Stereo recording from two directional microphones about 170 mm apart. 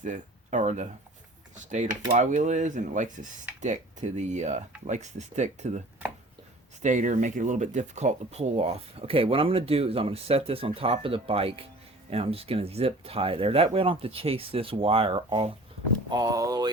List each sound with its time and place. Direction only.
0.0 s speech: 45° right (ahead or behind)
6.8 s speech: 45° right (ahead or behind); by 16.7 s 20° right (ahead or behind)